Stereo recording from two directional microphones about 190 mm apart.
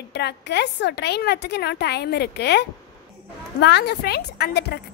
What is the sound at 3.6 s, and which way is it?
A woman's voice, 60° left (ahead or behind).